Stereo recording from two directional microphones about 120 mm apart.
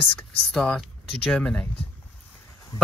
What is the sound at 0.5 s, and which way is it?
Speech, 5° left (ahead or behind).